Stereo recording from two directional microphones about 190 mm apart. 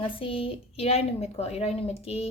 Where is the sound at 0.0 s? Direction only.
30° left (ahead or behind).